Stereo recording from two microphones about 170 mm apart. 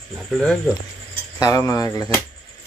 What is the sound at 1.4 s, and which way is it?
Speech, 20° left (ahead or behind).